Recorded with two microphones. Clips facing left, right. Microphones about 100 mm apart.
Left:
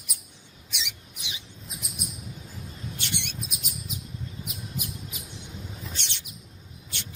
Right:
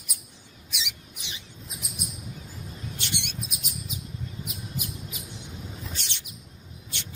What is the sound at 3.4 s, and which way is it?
Chirp, centre (ahead or behind).